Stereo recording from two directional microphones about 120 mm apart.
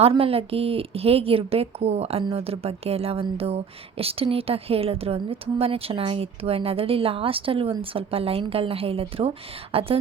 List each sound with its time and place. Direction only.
0.2 s speech: 55° right (ahead or behind)